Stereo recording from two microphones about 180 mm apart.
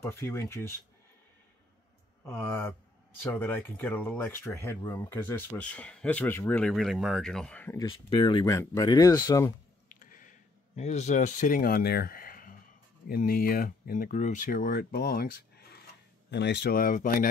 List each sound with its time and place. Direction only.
0.0 s speech: 15° left (ahead or behind)
2.2 s speech: 10° left (ahead or behind)
8.1 s speech: 25° left (ahead or behind)
9.8 s a sound: 50° left (ahead or behind)
10.8 s speech: 40° left (ahead or behind)